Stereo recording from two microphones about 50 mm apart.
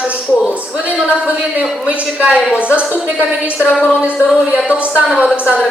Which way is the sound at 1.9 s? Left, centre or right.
Right.